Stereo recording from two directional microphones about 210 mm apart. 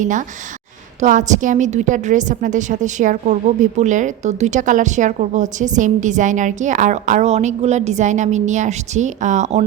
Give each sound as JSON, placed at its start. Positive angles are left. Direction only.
{"t": 0.0, "sound": "a woman's voice", "side_deg": -35}